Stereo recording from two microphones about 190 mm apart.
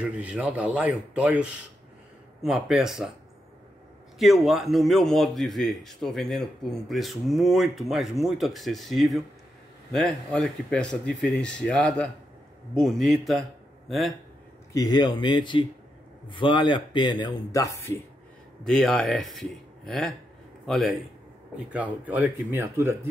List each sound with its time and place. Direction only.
0.0 s a man's voice: 5° right (ahead or behind)
4.2 s a man's voice: centre (ahead or behind)
14.7 s speech: 20° left (ahead or behind)
18.6 s a man's voice: centre (ahead or behind)